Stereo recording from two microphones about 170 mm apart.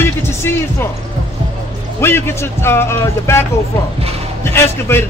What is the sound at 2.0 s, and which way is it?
A man's voice, 15° left (ahead or behind).